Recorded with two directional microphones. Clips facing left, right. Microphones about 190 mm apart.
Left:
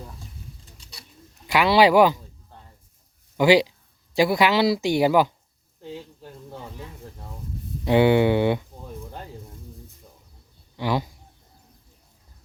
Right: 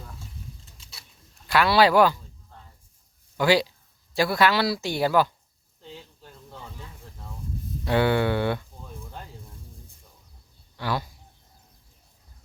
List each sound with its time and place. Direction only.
0.8 s a sound: centre (ahead or behind)
1.5 s speech: 15° left (ahead or behind)
3.3 s speech: 15° left (ahead or behind)
7.9 s speech: 15° left (ahead or behind)
10.8 s speech: 15° left (ahead or behind)